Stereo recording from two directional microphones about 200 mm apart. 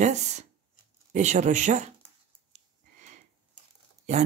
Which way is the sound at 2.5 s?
35° right (ahead or behind).